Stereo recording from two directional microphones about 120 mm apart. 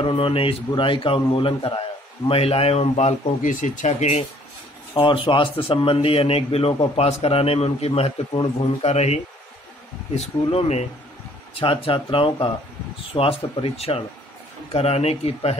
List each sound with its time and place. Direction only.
0.0 s a man's voice: 50° left (ahead or behind); by 4.3 s 70° left (ahead or behind)
4.9 s speech: 45° left (ahead or behind)
11.5 s a man's voice: 45° left (ahead or behind)